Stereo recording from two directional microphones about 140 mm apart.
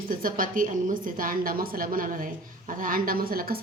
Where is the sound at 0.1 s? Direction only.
80° right.